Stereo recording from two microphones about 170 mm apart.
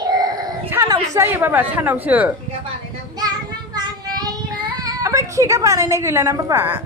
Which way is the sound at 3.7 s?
25° right (ahead or behind).